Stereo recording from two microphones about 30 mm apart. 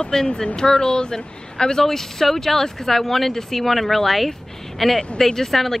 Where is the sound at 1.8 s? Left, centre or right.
Centre.